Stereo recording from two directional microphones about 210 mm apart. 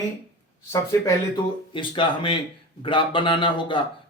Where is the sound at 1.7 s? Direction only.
25° left (ahead or behind).